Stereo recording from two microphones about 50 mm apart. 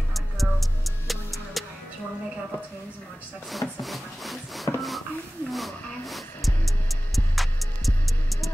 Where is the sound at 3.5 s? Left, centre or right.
Centre.